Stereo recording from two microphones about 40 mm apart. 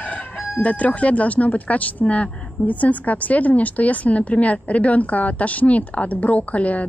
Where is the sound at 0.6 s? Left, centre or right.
Left.